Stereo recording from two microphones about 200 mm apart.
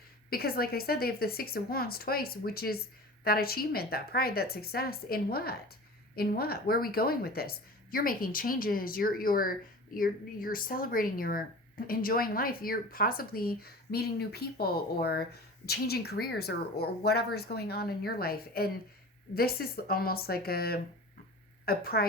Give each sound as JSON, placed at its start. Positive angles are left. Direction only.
{"t": 0.3, "sound": "a woman's voice", "side_deg": 50}